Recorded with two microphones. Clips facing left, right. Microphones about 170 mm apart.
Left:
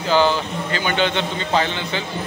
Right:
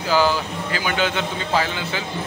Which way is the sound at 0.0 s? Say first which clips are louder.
Left 2 dB; 5° right (ahead or behind).